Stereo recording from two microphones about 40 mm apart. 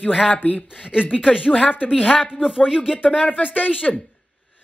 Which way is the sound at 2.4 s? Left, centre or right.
Centre.